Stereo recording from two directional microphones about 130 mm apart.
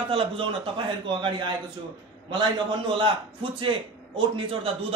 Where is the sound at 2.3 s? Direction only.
40° right (ahead or behind).